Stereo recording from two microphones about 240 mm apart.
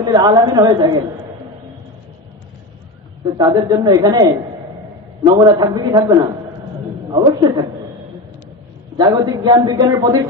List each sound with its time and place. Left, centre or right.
0.0 s a man's voice: centre
3.3 s a man's voice: centre
8.9 s a man's voice: centre